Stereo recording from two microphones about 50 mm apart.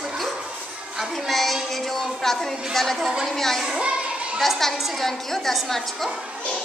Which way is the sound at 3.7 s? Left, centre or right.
Right.